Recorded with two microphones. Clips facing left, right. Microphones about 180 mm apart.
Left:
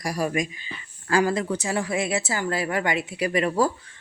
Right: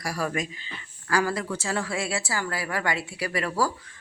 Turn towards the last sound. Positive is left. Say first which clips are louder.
# left 5 dB
turn(degrees=25)  # may be behind; listen again after turning